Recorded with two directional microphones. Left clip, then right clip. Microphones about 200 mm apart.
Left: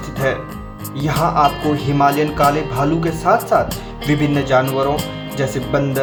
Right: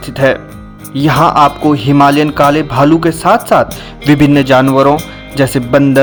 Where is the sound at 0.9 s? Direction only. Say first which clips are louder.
Right 8 dB; 45° right (ahead or behind).